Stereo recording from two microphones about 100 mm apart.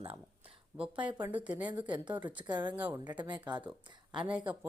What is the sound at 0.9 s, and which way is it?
Speech, 55° right (ahead or behind).